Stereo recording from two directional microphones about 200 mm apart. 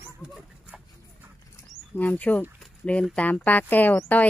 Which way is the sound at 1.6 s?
10° left (ahead or behind).